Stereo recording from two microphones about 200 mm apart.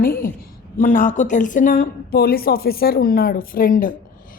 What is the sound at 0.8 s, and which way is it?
A woman's voice, 40° left (ahead or behind).